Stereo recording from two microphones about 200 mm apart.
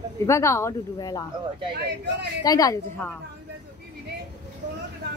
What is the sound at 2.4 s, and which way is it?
Speech, 15° left (ahead or behind).